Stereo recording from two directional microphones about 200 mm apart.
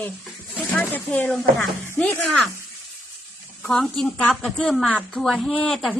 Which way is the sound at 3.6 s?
5° left (ahead or behind).